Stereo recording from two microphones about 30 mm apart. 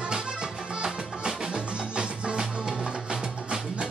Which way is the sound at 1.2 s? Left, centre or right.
Right.